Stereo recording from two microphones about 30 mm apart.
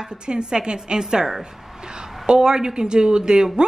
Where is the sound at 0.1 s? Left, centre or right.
Right.